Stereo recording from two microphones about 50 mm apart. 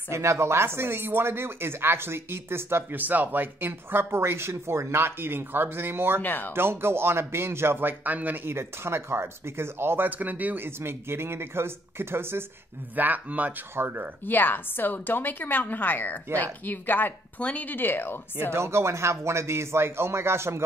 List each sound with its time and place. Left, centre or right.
0.1 s speech: right
3.0 s speech: right
6.2 s a woman's voice: left
6.5 s speech: right
8.0 s a man's voice: right
8.5 s speech: right
10.0 s a man's voice: right
10.8 s speech: right
12.9 s a man's voice: right
13.7 s speech: right
14.2 s a woman's voice: left
18.5 s speech: right